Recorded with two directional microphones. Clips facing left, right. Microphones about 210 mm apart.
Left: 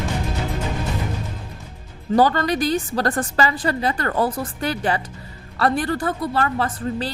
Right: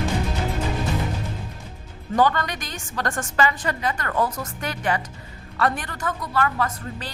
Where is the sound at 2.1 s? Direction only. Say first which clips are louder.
Left 4 dB; 35° left (ahead or behind).